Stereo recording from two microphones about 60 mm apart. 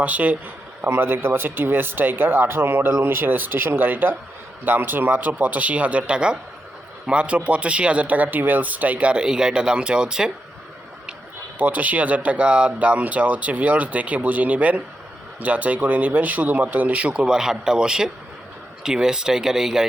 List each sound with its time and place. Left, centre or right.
0.0 s speech: right
0.8 s speech: right; by 10.3 s centre
11.5 s speech: right; by 19.9 s centre